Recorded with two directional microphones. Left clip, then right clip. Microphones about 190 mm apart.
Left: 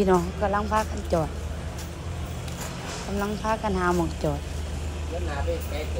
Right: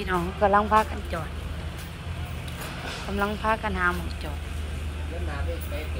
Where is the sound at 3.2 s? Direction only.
5° left (ahead or behind).